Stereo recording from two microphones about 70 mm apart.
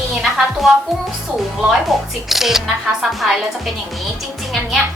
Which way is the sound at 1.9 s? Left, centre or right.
Centre.